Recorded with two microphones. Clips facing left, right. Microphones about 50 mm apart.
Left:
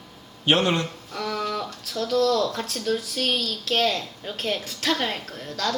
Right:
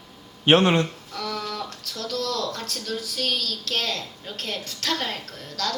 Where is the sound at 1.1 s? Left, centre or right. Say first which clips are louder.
Left 4 dB; centre.